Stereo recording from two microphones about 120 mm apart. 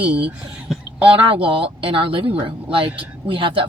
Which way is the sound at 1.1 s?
50° right (ahead or behind).